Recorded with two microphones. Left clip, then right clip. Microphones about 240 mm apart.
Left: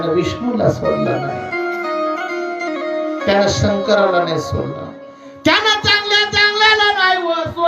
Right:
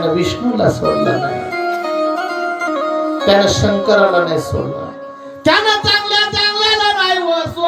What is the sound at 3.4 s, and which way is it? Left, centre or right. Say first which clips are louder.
Speech: right 3 dB; right.